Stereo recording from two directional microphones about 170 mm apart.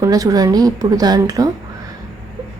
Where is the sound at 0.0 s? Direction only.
20° right (ahead or behind).